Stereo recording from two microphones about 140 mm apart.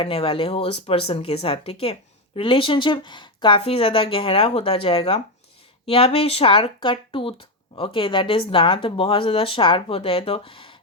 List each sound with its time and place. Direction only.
0.0 s speech: 40° left (ahead or behind)